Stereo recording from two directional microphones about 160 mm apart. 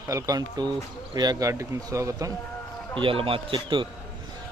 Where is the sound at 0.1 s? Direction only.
20° right (ahead or behind).